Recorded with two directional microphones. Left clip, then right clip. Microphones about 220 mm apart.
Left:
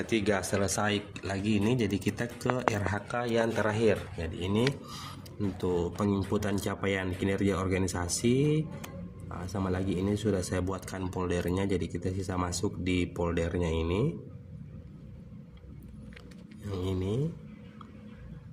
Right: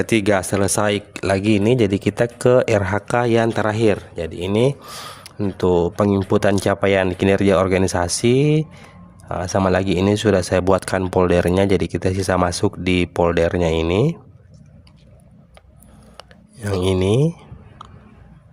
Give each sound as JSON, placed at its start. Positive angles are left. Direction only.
{"t": 0.0, "sound": "speech", "side_deg": -50}
{"t": 16.6, "sound": "speech", "side_deg": -50}